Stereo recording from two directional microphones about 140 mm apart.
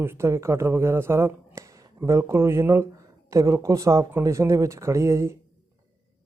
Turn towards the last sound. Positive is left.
turn(degrees=-20)  # may be behind; listen again after turning